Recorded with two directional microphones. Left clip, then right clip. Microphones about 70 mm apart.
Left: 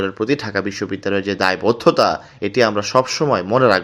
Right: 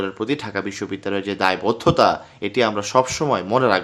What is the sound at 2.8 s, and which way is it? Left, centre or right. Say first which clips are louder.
Speech: left 2 dB; left.